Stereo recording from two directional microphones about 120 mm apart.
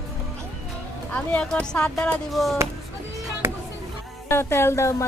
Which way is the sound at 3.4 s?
20° right (ahead or behind).